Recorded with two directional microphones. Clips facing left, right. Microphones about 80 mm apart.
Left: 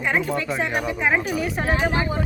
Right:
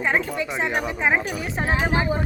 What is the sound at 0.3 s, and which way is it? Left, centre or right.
A woman's voice, centre.